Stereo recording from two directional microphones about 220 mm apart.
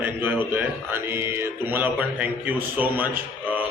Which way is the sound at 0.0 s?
10° right (ahead or behind).